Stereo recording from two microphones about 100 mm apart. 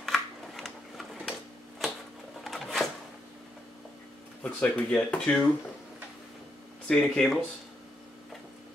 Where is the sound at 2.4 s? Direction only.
Centre (ahead or behind).